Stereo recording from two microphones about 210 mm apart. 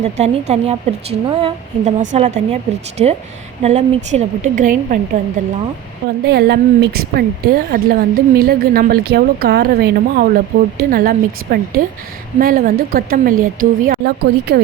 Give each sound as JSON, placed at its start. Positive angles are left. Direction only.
{"t": 0.0, "sound": "a woman's voice", "side_deg": -30}
{"t": 6.2, "sound": "a woman's voice", "side_deg": -50}
{"t": 12.4, "sound": "a woman's voice", "side_deg": -45}